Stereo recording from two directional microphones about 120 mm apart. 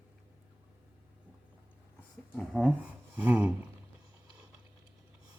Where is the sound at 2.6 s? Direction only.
10° right (ahead or behind).